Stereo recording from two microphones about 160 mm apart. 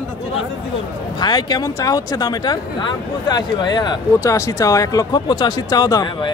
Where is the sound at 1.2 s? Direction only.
25° left (ahead or behind).